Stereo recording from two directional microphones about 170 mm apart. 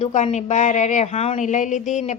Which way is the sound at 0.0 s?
40° left (ahead or behind).